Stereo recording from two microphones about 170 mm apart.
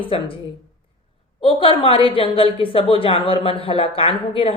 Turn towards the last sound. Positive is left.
turn(degrees=30)  # may be behind; listen again after turning